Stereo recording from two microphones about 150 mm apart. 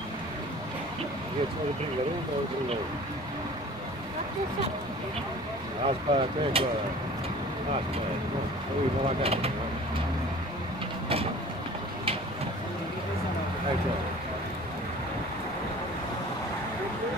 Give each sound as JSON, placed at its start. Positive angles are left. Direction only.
{"t": 5.9, "sound": "speech", "side_deg": -40}
{"t": 9.2, "sound": "speech", "side_deg": -40}